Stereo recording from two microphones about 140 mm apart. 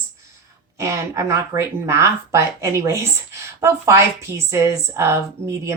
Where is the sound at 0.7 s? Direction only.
20° right (ahead or behind).